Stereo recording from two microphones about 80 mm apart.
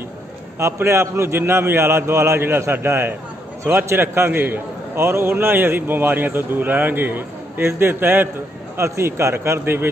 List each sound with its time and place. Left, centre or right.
0.6 s a man's voice: right